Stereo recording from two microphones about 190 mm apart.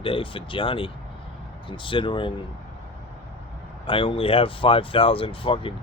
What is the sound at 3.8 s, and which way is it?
Speech, 25° left (ahead or behind).